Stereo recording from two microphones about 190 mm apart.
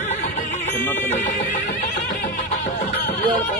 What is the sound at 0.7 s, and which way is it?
Music, 10° left (ahead or behind).